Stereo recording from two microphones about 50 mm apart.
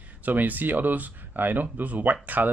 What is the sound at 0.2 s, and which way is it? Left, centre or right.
Speech, right.